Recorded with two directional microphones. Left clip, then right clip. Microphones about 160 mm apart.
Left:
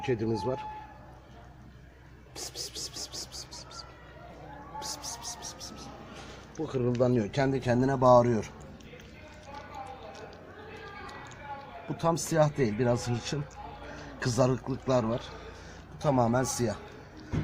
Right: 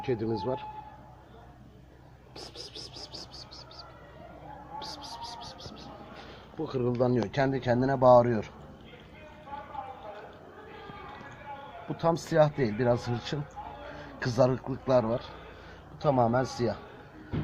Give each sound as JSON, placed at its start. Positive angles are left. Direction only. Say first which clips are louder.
{"t": 0.0, "sound": "speech", "louder": "left 1 dB", "side_deg": 20}
{"t": 2.7, "sound": "a sound", "louder": "left 3 dB", "side_deg": 20}
{"t": 4.8, "sound": "vehicle", "louder": "left 2 dB", "side_deg": 10}
{"t": 6.6, "sound": "speech", "louder": "even", "side_deg": 10}
{"t": 12.0, "sound": "speech", "louder": "right 2 dB", "side_deg": 10}